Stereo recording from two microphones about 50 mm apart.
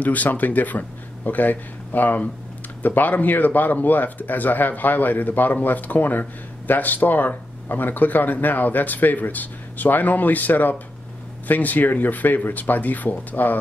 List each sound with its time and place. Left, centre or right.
0.0 s speech: left